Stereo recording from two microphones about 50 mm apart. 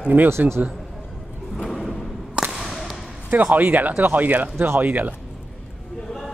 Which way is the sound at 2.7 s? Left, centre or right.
Centre.